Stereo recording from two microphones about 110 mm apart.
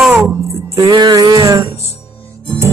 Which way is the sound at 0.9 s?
45° right (ahead or behind).